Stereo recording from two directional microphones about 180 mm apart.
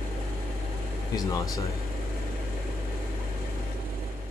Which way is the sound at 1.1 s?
20° left (ahead or behind).